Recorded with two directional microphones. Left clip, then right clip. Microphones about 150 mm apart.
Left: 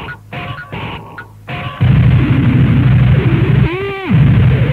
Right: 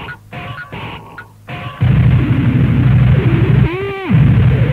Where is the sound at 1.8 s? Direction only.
30° left (ahead or behind).